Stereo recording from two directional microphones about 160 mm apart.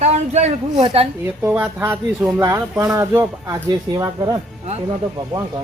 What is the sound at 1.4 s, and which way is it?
Speech, 15° right (ahead or behind).